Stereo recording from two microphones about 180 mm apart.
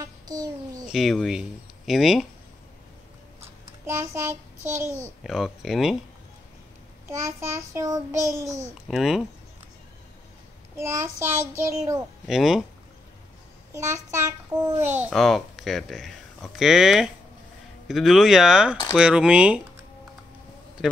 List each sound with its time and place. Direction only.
0.0 s a child's voice: 20° right (ahead or behind)
0.8 s speech: centre (ahead or behind)
3.3 s a child's voice: 15° right (ahead or behind)
5.2 s speech: centre (ahead or behind)
7.1 s child singing: 15° right (ahead or behind)
8.8 s speech: centre (ahead or behind)
10.8 s child singing: 15° right (ahead or behind)
12.3 s speech: centre (ahead or behind)
14.2 s child singing: 20° right (ahead or behind)
15.0 s speech: centre (ahead or behind)